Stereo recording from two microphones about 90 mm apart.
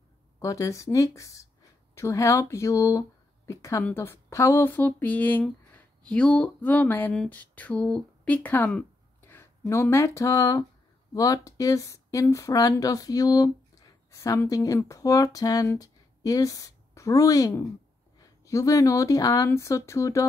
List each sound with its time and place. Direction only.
0.4 s speech: 35° left (ahead or behind); by 8.7 s 20° left (ahead or behind)
9.2 s a sound: 25° left (ahead or behind)
9.7 s a woman's voice: 30° left (ahead or behind)